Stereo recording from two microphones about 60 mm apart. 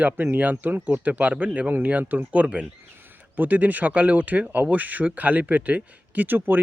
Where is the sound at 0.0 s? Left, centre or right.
Right.